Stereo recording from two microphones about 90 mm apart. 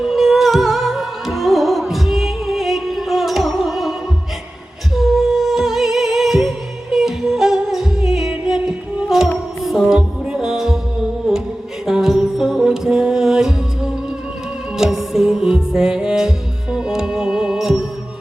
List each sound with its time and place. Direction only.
0.0 s music: 5° right (ahead or behind)
4.9 s music: centre (ahead or behind)